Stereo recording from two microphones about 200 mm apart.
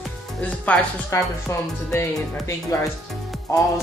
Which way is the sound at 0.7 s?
5° left (ahead or behind).